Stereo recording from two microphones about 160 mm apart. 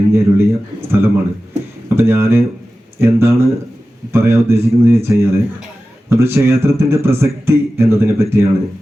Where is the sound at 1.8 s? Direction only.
15° right (ahead or behind).